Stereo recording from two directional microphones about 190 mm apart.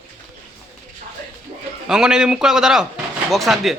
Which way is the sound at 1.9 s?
5° right (ahead or behind).